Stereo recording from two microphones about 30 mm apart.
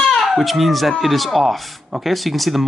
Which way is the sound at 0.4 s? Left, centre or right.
Centre.